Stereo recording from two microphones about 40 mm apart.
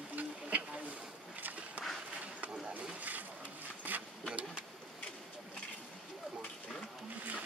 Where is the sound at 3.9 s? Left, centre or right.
Right.